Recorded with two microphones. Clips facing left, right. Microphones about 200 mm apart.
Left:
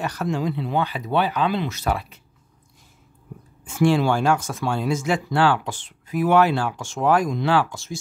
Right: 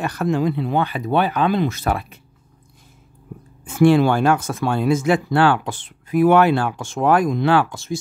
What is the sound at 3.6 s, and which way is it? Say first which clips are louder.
Speech: right 5 dB; 60° right (ahead or behind).